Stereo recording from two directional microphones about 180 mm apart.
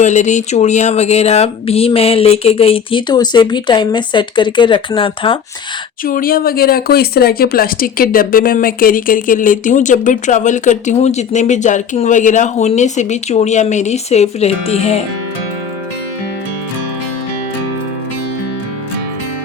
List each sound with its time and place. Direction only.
0.0 s speech: 40° left (ahead or behind)
6.1 s speech: 55° left (ahead or behind); by 15.0 s 35° left (ahead or behind)